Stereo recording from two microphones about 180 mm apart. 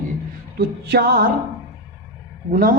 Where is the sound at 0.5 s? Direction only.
60° right (ahead or behind).